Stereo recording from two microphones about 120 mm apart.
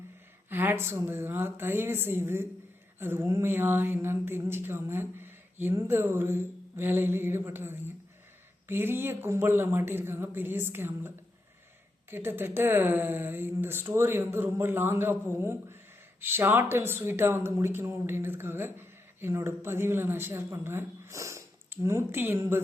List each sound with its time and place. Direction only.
0.5 s speech: 20° right (ahead or behind)
12.1 s speech: 20° right (ahead or behind)